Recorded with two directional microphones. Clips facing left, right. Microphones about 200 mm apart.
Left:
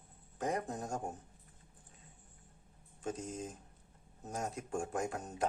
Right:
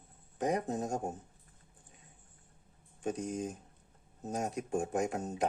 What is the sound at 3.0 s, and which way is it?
Speech, 15° right (ahead or behind).